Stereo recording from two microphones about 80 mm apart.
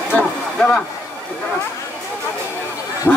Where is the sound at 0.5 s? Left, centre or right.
Centre.